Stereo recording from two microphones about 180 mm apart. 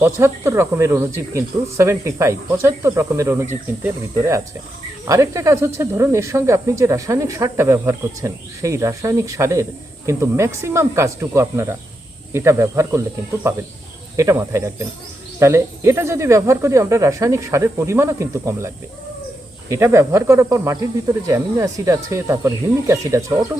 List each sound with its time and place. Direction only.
0.0 s speech: 15° right (ahead or behind)
14.2 s speech: 15° right (ahead or behind)
19.7 s speech: 15° right (ahead or behind)